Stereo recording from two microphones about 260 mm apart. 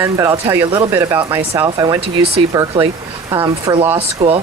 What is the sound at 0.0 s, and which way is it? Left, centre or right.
Speech, centre.